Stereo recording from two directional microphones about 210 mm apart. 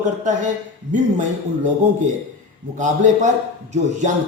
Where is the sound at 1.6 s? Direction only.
35° right (ahead or behind).